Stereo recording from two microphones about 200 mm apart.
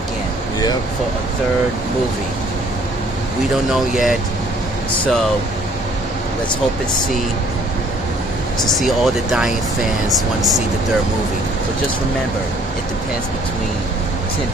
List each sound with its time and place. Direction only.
3.7 s speech: centre (ahead or behind)
8.6 s speech: centre (ahead or behind)